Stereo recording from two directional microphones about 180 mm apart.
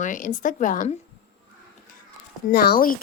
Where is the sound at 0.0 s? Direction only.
45° left (ahead or behind).